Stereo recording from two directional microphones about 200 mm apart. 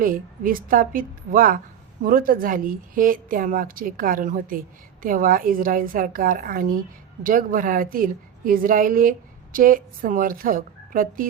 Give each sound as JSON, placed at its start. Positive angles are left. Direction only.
{"t": 0.0, "sound": "a woman's voice", "side_deg": -45}